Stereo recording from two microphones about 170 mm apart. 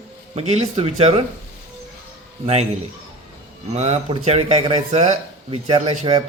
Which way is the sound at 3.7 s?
40° right (ahead or behind).